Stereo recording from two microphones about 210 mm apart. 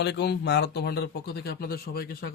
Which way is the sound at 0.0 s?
55° left (ahead or behind).